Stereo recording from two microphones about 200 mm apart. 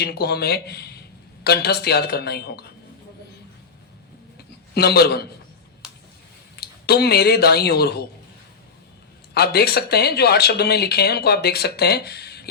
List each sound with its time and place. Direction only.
0.0 s speech: 55° left (ahead or behind)
4.7 s speech: 55° left (ahead or behind)
5.8 s a sound: 5° right (ahead or behind)
6.6 s speech: 55° left (ahead or behind)
9.3 s speech: 55° left (ahead or behind)